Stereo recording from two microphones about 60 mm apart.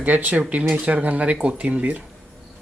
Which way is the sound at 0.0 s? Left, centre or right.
Right.